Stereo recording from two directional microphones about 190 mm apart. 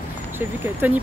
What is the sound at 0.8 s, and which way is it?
Speech, 10° right (ahead or behind).